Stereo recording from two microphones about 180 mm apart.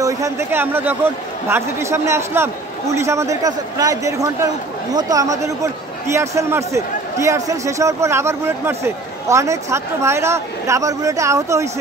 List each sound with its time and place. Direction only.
0.0 s a man's voice: 15° right (ahead or behind)